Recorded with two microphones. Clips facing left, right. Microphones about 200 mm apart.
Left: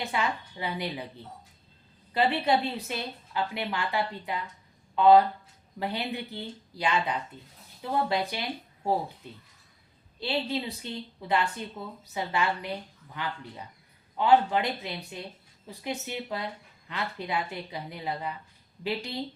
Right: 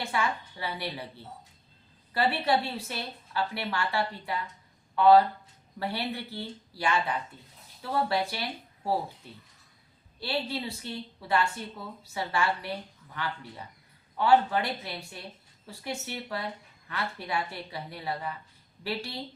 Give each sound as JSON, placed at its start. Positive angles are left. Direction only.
{"t": 0.0, "sound": "a woman's voice", "side_deg": 20}